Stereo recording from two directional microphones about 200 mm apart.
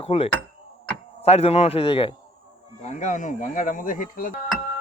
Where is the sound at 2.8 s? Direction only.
35° left (ahead or behind).